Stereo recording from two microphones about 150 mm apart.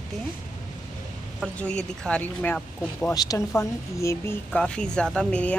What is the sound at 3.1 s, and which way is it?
Speech, 25° left (ahead or behind).